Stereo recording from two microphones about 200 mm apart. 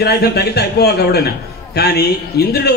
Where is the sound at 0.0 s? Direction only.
55° left (ahead or behind).